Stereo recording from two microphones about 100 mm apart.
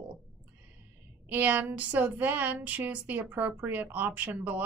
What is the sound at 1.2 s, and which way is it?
Speech, 15° right (ahead or behind).